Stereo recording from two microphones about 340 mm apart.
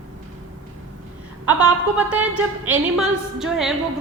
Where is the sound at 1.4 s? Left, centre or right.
Centre.